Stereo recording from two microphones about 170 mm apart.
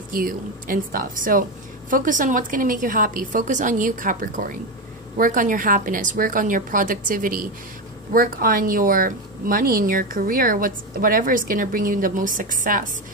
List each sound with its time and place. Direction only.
0.1 s a woman's voice: 55° right (ahead or behind)